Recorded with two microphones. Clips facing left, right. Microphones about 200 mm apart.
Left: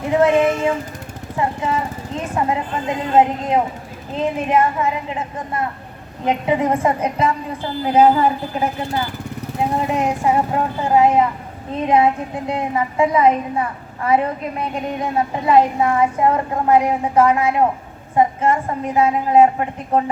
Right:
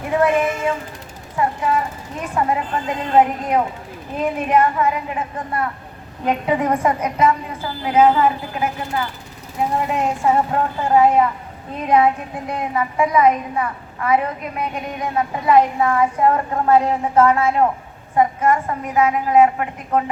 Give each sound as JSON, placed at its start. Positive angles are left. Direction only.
{"t": 0.1, "sound": "a sound", "side_deg": 25}
{"t": 1.4, "sound": "a woman's voice", "side_deg": 25}
{"t": 9.7, "sound": "a woman's voice", "side_deg": 20}
{"t": 18.2, "sound": "a woman's voice", "side_deg": 25}